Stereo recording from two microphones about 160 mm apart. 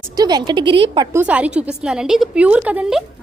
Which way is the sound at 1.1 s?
10° right (ahead or behind).